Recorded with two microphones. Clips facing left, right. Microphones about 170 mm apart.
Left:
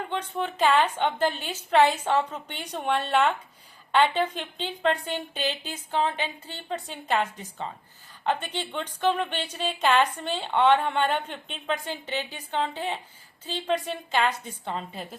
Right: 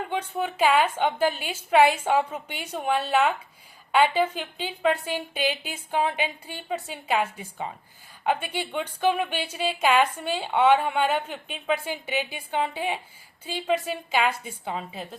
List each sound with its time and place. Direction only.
0.1 s a woman's voice: 10° right (ahead or behind)